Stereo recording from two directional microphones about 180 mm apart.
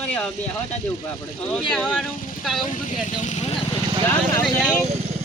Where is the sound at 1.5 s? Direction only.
5° left (ahead or behind).